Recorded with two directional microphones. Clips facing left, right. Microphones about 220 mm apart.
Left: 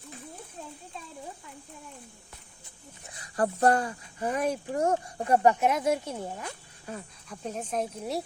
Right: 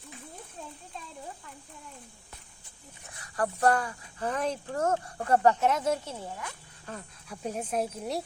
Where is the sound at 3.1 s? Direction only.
25° left (ahead or behind).